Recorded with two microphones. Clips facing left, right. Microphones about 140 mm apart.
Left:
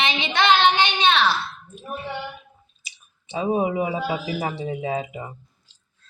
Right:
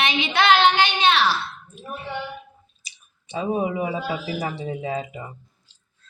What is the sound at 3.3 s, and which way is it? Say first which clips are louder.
A man's voice: left 2 dB; 20° left (ahead or behind).